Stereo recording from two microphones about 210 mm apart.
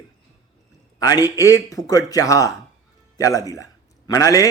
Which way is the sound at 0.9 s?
20° left (ahead or behind).